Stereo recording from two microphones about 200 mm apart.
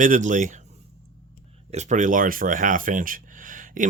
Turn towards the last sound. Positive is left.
turn(degrees=-40)  # may be behind; listen again after turning